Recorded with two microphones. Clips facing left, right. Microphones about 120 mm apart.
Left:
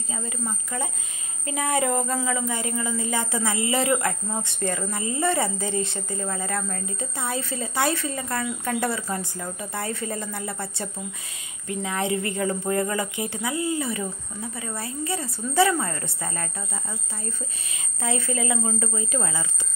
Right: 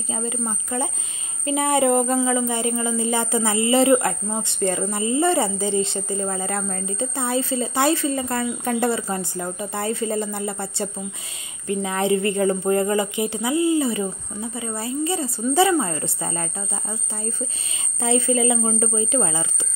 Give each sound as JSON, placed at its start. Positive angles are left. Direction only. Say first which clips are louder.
{"t": 0.1, "sound": "speech", "louder": "right 5 dB", "side_deg": -25}
{"t": 18.0, "sound": "speech", "louder": "right 7 dB", "side_deg": -25}